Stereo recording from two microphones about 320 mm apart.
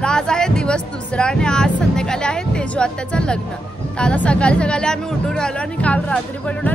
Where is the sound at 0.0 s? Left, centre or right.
Centre.